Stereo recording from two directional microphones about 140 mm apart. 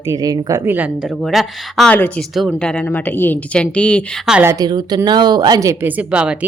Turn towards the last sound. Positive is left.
turn(degrees=-5)  # may be behind; listen again after turning